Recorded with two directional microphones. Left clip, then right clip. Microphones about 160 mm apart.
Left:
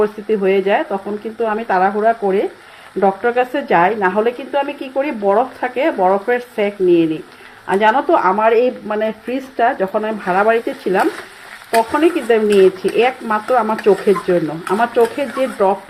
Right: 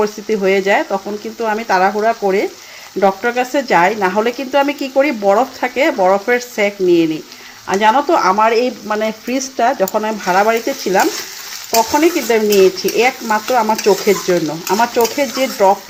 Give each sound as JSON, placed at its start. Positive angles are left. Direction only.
{"t": 0.0, "sound": "speech", "side_deg": -30}